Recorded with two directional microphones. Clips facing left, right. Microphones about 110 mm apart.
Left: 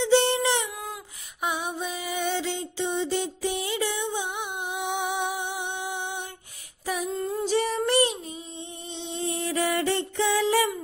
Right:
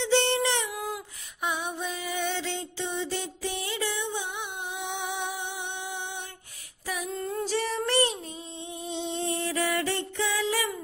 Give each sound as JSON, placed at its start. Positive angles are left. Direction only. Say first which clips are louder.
{"t": 0.0, "sound": "a sound", "louder": "left 3 dB", "side_deg": 10}
{"t": 0.7, "sound": "a sound", "louder": "right 3 dB", "side_deg": -5}
{"t": 1.4, "sound": "music", "louder": "left 2 dB", "side_deg": 10}
{"t": 7.2, "sound": "music", "louder": "left 4 dB", "side_deg": 15}
{"t": 8.5, "sound": "music", "louder": "right 3 dB", "side_deg": -5}
{"t": 9.4, "sound": "music", "louder": "left 5 dB", "side_deg": 25}